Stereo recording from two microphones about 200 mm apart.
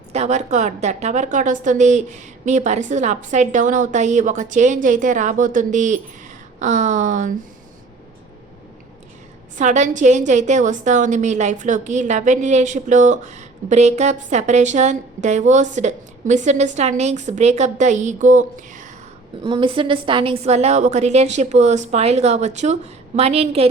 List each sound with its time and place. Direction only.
0.1 s a woman's voice: 35° right (ahead or behind)
9.6 s a woman's voice: 35° right (ahead or behind)
19.4 s a woman's voice: 25° right (ahead or behind)